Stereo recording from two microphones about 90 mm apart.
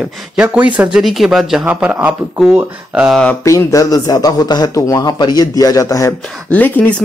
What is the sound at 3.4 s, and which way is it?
Speech, 35° left (ahead or behind).